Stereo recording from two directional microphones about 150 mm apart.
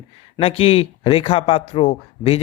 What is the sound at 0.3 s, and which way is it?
Speech, 40° left (ahead or behind).